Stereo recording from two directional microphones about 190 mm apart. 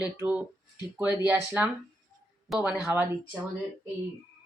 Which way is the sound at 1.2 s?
10° right (ahead or behind).